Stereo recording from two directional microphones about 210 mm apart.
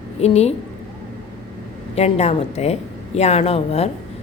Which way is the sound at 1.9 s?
30° left (ahead or behind).